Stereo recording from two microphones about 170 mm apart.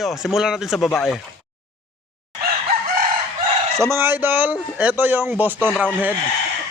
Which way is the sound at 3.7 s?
15° right (ahead or behind).